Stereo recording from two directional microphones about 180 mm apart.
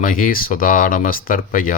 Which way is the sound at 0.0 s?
50° left (ahead or behind).